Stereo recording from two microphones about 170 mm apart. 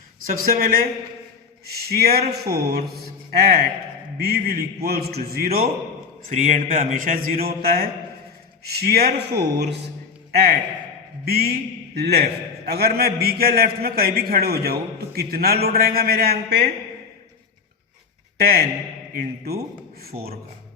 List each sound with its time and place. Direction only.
0.3 s a man's voice: 55° right (ahead or behind)
6.2 s a man's voice: 45° right (ahead or behind); by 9.7 s 75° right (ahead or behind)
11.3 s a man's voice: 65° right (ahead or behind)
18.3 s a man's voice: 65° right (ahead or behind)